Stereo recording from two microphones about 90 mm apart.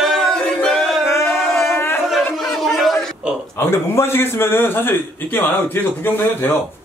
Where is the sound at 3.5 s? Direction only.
30° left (ahead or behind).